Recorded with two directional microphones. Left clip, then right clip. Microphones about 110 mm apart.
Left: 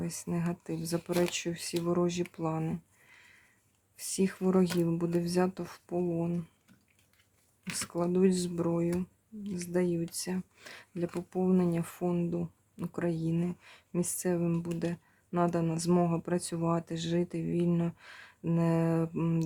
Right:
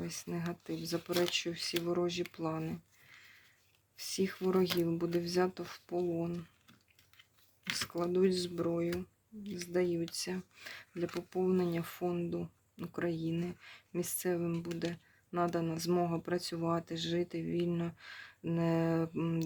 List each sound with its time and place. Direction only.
0.0 s speech: 35° left (ahead or behind)
1.3 s speech: 45° left (ahead or behind)
2.2 s speech: 35° left (ahead or behind)
3.9 s speech: 40° left (ahead or behind)
4.7 s speech: 25° left (ahead or behind)
4.9 s speech: 35° left (ahead or behind)
7.9 s speech: 35° left (ahead or behind)
11.0 s speech: 15° left (ahead or behind)
11.3 s speech: 35° left (ahead or behind)